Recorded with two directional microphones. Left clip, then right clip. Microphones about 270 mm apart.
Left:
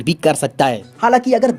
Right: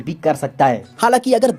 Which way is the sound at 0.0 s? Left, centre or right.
Left.